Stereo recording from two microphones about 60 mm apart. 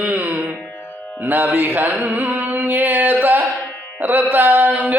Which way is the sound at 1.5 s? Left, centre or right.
Right.